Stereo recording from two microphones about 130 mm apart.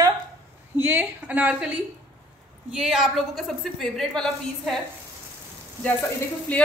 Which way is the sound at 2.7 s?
5° right (ahead or behind).